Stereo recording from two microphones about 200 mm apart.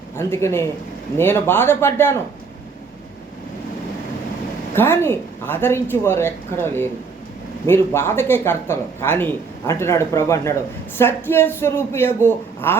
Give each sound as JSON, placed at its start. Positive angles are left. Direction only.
{"t": 0.2, "sound": "speech", "side_deg": 10}
{"t": 4.7, "sound": "speech", "side_deg": 10}